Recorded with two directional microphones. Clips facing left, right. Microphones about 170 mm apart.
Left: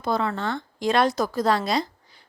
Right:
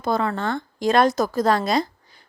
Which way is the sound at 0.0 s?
45° right (ahead or behind).